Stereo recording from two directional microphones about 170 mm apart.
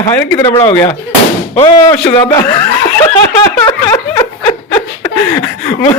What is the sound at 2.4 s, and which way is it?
Snicker, 20° left (ahead or behind).